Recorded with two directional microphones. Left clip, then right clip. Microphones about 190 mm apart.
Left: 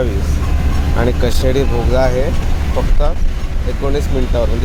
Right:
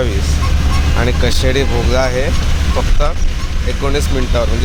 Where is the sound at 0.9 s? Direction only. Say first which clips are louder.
Left 1 dB; 15° left (ahead or behind).